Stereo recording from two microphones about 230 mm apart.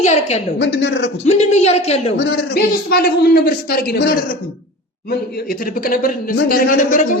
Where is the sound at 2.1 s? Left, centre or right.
Left.